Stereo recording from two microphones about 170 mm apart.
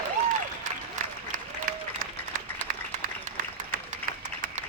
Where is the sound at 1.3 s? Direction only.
55° right (ahead or behind).